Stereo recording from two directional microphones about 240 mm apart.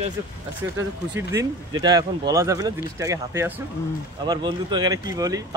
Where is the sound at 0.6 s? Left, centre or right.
Right.